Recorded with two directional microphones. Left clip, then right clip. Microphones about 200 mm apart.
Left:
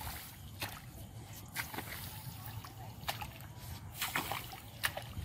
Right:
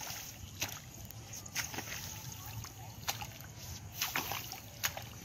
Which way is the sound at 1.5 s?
10° right (ahead or behind).